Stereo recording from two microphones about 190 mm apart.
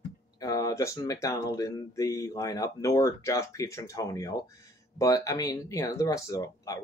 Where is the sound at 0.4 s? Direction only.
20° left (ahead or behind).